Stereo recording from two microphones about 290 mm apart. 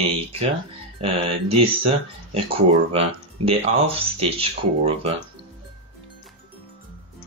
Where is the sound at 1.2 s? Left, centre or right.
Centre.